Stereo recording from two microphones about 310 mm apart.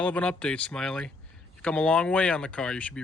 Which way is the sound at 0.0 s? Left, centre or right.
Centre.